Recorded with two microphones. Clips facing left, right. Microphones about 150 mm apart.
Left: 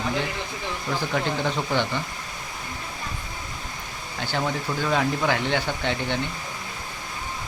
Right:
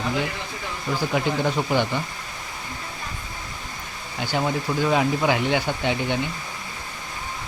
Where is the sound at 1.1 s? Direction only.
10° right (ahead or behind).